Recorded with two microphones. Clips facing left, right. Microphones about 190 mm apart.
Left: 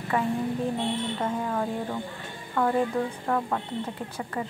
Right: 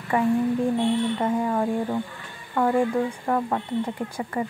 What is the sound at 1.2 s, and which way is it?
A woman's voice, 10° right (ahead or behind).